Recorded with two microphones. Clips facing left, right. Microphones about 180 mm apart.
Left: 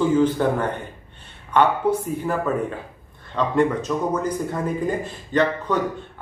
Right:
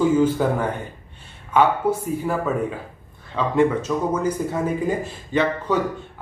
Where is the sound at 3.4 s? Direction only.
5° right (ahead or behind).